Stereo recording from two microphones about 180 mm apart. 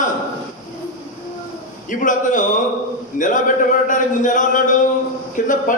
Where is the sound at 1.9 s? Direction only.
45° left (ahead or behind).